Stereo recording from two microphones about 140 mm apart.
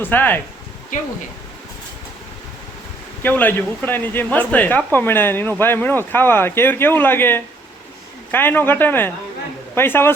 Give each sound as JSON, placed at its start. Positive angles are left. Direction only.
{"t": 0.0, "sound": "speech", "side_deg": 15}
{"t": 3.2, "sound": "speech", "side_deg": 15}